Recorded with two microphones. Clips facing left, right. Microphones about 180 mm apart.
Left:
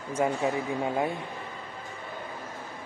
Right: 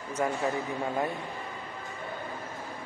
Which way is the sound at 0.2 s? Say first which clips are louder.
Left 2 dB; 15° left (ahead or behind).